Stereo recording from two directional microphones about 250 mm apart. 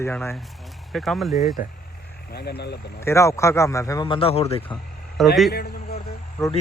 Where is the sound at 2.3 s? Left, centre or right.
Left.